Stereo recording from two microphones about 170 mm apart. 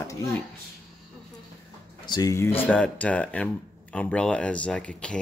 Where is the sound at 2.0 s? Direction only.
25° left (ahead or behind).